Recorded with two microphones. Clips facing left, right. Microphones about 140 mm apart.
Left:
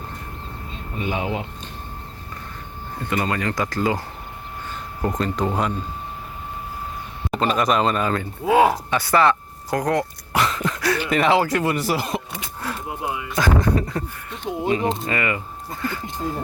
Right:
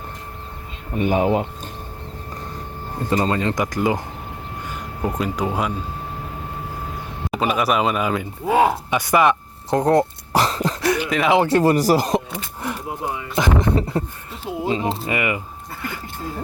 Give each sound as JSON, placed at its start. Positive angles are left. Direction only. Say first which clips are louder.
{"t": 0.9, "sound": "speech", "louder": "right 7 dB", "side_deg": -50}
{"t": 3.1, "sound": "speech", "louder": "right 3 dB", "side_deg": -25}
{"t": 5.0, "sound": "speech", "louder": "even", "side_deg": -10}
{"t": 7.3, "sound": "speech", "louder": "even", "side_deg": -5}
{"t": 8.9, "sound": "throat clearing", "louder": "right 1 dB", "side_deg": -15}
{"t": 10.8, "sound": "a sound", "louder": "right 3 dB", "side_deg": -15}
{"t": 11.4, "sound": "speech", "louder": "right 6 dB", "side_deg": -35}
{"t": 12.9, "sound": "speech", "louder": "even", "side_deg": 5}
{"t": 13.3, "sound": "speech", "louder": "right 1 dB", "side_deg": -25}
{"t": 14.4, "sound": "speech", "louder": "even", "side_deg": -5}
{"t": 14.8, "sound": "a sound", "louder": "left 1 dB", "side_deg": -5}
{"t": 15.1, "sound": "speech", "louder": "right 1 dB", "side_deg": -15}